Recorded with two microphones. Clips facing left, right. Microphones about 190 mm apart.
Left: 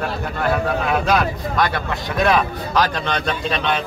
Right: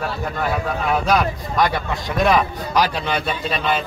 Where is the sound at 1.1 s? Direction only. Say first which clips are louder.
Even; 15° right (ahead or behind).